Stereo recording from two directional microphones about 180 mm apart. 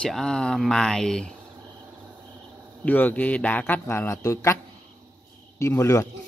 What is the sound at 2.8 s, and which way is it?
A man's voice, 10° left (ahead or behind).